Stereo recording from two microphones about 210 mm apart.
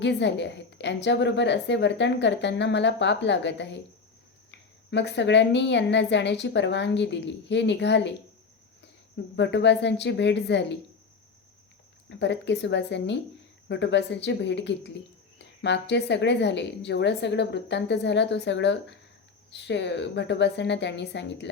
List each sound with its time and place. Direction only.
0.0 s a woman's voice: 55° left (ahead or behind)
9.3 s a woman's voice: 55° left (ahead or behind)
12.0 s a woman's voice: 55° left (ahead or behind)